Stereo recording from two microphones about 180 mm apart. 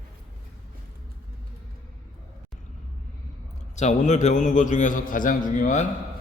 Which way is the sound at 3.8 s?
40° left (ahead or behind).